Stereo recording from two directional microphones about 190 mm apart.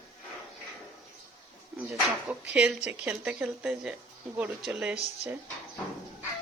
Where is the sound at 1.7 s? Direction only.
5° right (ahead or behind).